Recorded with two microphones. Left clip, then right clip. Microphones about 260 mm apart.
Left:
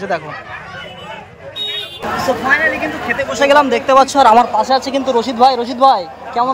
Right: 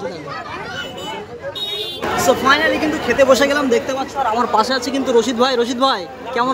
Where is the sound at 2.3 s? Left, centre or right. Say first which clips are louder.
Right 3 dB; centre.